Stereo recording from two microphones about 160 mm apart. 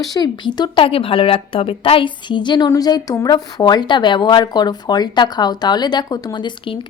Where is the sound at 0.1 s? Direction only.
25° left (ahead or behind).